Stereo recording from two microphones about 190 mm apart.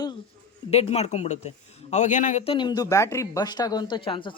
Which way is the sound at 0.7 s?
35° left (ahead or behind).